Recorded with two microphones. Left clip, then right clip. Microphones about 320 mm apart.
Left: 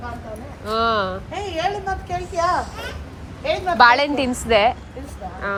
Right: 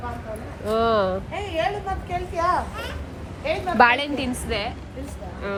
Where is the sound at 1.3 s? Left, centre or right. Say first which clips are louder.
Left 2 dB; left.